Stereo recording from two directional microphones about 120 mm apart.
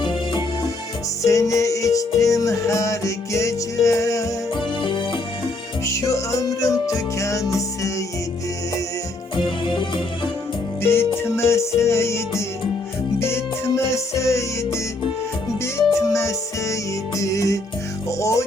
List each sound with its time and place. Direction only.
0.0 s music: 40° left (ahead or behind)
1.2 s music: 25° left (ahead or behind)
4.5 s music: 40° left (ahead or behind)
5.8 s music: 25° left (ahead or behind)
9.3 s music: 40° left (ahead or behind)
10.8 s music: 20° left (ahead or behind)